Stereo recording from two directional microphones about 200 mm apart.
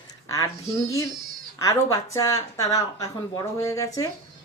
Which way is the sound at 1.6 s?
15° left (ahead or behind).